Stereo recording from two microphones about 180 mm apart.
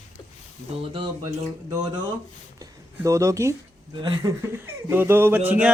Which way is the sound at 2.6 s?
15° right (ahead or behind).